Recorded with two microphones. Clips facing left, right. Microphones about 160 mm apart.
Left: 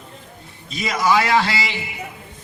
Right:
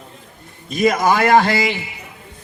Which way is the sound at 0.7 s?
50° right (ahead or behind).